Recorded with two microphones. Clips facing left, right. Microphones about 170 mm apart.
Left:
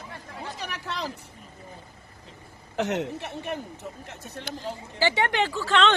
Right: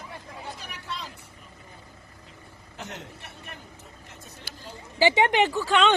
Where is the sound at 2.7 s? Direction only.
75° left (ahead or behind).